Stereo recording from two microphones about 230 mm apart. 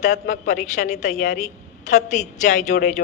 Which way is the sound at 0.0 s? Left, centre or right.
Left.